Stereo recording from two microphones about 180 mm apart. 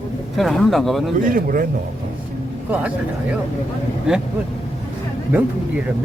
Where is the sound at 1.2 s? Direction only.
50° right (ahead or behind).